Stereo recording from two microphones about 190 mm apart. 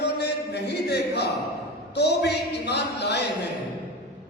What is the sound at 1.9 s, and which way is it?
A man's voice, 60° left (ahead or behind).